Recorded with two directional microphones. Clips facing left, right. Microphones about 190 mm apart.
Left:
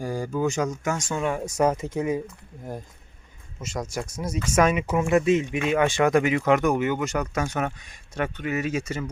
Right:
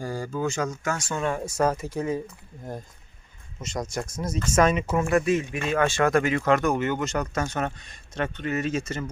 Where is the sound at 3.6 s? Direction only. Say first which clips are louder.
Even; 5° left (ahead or behind).